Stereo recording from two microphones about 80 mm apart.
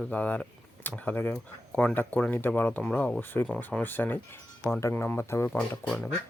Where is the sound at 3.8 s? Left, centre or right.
Left.